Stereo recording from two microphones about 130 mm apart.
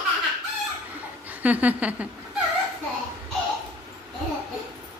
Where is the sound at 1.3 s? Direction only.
15° right (ahead or behind).